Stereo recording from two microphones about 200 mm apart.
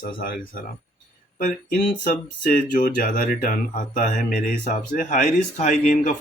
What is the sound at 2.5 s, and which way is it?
Speech, 40° left (ahead or behind).